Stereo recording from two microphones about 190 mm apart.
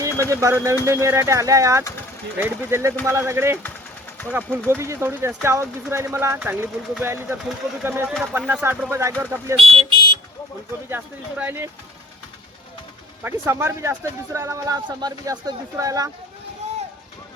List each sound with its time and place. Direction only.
0.3 s speech: 15° right (ahead or behind)
9.6 s car alarm: 25° right (ahead or behind)
10.8 s speech: 10° right (ahead or behind)
13.2 s speech: 15° right (ahead or behind)
16.6 s run: 35° right (ahead or behind)